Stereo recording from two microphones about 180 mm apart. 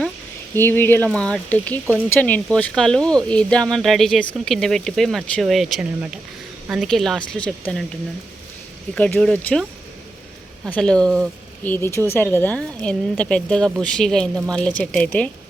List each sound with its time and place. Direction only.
0.5 s speech: 10° left (ahead or behind)
9.0 s speech: 5° left (ahead or behind)
10.7 s speech: 5° left (ahead or behind)